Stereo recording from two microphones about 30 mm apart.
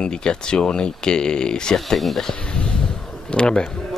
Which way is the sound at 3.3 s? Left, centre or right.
Left.